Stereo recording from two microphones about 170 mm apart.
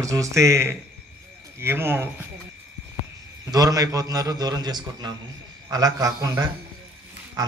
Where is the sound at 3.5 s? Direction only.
20° right (ahead or behind).